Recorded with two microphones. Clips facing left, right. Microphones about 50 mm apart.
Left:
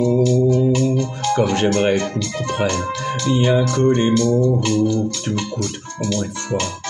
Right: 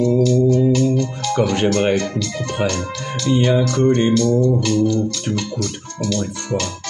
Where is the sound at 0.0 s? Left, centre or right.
Left.